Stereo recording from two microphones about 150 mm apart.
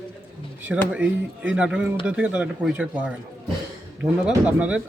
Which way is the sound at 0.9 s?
10° right (ahead or behind).